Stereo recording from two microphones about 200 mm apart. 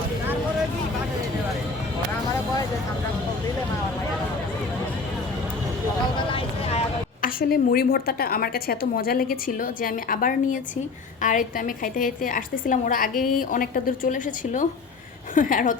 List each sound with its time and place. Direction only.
6.1 s vehicle: 30° left (ahead or behind)
7.2 s a woman's voice: 45° left (ahead or behind)